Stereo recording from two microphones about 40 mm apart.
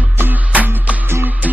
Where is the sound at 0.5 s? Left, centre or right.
Right.